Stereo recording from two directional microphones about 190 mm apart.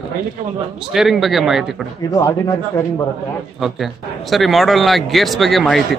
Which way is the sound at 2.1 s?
20° left (ahead or behind).